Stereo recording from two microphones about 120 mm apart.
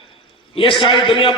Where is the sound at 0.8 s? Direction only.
45° left (ahead or behind).